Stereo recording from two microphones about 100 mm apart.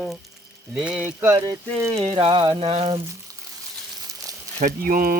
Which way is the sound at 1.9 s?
75° right (ahead or behind).